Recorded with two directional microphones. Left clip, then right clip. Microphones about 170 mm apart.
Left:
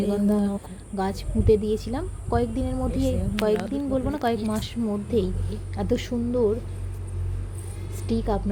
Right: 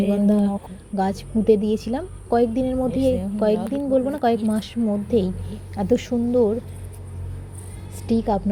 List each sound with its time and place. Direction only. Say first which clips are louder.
0.0 s a woman's voice: right 4 dB; 15° right (ahead or behind)
8.0 s a woman's voice: right 5 dB; 20° right (ahead or behind)